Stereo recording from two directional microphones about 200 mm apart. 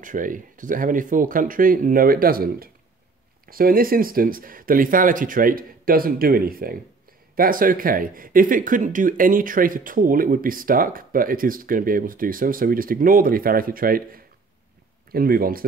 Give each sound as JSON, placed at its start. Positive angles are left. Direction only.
{"t": 0.0, "sound": "speech", "side_deg": -40}